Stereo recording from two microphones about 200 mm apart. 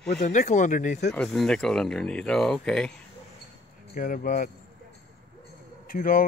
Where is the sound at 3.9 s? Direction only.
45° left (ahead or behind).